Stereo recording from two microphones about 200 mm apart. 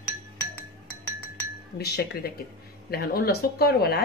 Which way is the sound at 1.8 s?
50° left (ahead or behind).